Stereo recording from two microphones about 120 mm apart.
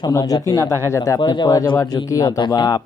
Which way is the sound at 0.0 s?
30° left (ahead or behind).